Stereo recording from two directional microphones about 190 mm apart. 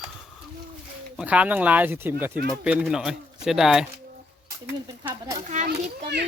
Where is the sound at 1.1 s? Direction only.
5° right (ahead or behind).